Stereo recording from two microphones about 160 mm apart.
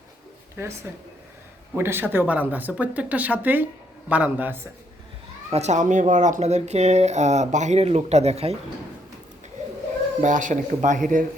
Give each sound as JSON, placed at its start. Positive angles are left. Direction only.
{"t": 0.5, "sound": "speech", "side_deg": -15}
{"t": 5.5, "sound": "speech", "side_deg": -45}
{"t": 10.2, "sound": "speech", "side_deg": -55}